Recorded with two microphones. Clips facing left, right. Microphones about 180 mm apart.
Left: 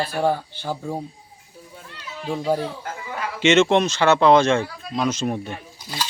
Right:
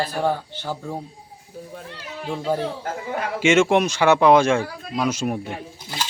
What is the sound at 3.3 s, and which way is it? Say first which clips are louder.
Speech: left 1 dB; 10° right (ahead or behind).